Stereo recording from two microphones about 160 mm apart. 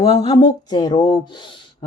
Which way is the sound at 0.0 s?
35° left (ahead or behind).